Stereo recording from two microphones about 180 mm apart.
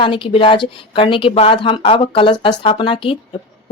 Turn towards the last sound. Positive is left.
turn(degrees=30)  # may be behind; listen again after turning